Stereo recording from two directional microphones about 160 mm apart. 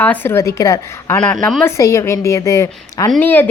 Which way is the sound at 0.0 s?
10° left (ahead or behind).